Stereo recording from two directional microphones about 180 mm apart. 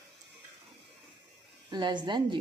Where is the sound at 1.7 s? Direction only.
25° right (ahead or behind).